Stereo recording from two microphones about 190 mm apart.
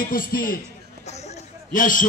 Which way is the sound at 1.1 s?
35° left (ahead or behind).